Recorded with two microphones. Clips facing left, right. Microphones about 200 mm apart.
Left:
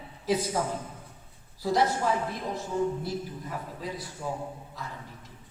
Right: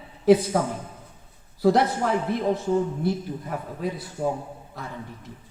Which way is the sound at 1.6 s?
60° right (ahead or behind).